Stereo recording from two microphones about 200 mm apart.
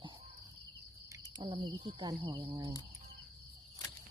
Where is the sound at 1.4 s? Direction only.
25° right (ahead or behind).